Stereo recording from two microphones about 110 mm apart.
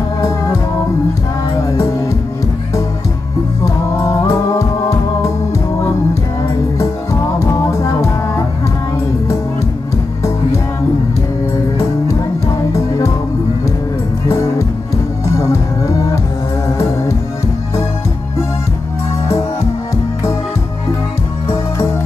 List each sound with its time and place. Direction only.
3.6 s music: 30° left (ahead or behind)
6.8 s music: 30° left (ahead or behind)